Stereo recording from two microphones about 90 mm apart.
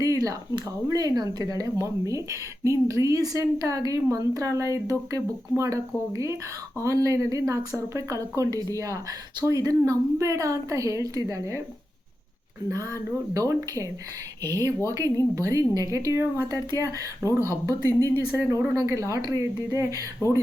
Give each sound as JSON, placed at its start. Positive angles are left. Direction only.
{"t": 0.0, "sound": "speech", "side_deg": -40}
{"t": 12.7, "sound": "speech", "side_deg": -35}